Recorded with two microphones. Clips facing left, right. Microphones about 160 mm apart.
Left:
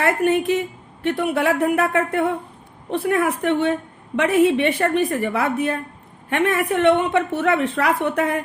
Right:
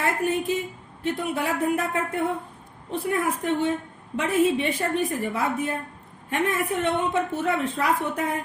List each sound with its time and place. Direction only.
0.0 s a woman's voice: 70° left (ahead or behind)